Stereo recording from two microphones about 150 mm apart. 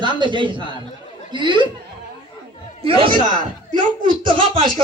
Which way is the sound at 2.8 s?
35° right (ahead or behind).